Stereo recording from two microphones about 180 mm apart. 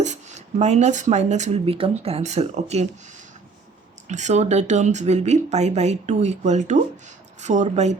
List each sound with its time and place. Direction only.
0.0 s speech: 40° right (ahead or behind)
4.1 s speech: 40° right (ahead or behind)